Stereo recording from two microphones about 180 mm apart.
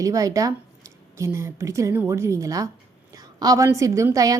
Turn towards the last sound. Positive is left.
turn(degrees=-20)  # may be behind; listen again after turning